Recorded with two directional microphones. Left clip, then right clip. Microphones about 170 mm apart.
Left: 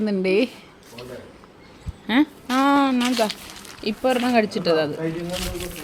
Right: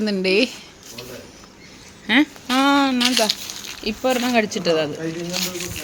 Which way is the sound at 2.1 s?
5° right (ahead or behind).